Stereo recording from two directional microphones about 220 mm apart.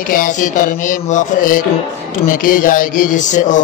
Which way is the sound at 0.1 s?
40° left (ahead or behind).